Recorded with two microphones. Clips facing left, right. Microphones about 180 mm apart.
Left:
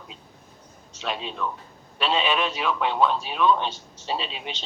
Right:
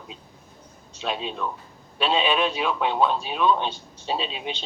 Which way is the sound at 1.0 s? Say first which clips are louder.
Right 1 dB; 15° right (ahead or behind).